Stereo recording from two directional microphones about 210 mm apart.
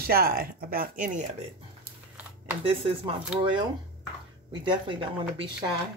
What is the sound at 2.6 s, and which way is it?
Speech, 25° right (ahead or behind).